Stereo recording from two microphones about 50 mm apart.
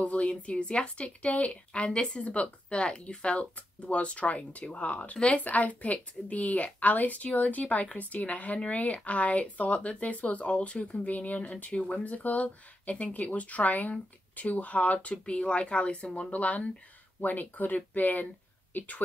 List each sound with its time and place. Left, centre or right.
0.0 s a woman's voice: left